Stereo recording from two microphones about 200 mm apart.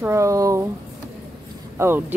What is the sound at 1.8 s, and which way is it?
Speech, 10° right (ahead or behind).